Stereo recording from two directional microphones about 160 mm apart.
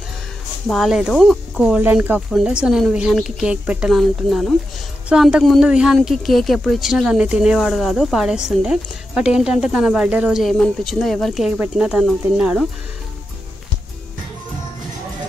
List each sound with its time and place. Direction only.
0.7 s a woman's voice: centre (ahead or behind)